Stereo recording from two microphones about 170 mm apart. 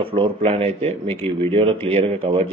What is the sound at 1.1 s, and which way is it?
Speech, 15° left (ahead or behind).